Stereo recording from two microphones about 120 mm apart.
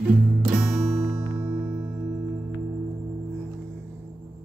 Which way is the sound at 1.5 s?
15° right (ahead or behind).